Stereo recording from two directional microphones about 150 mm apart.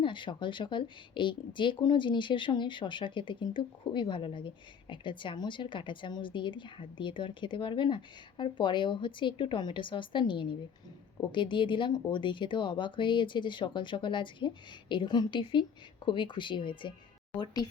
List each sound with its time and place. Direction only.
0.0 s speech: 35° left (ahead or behind)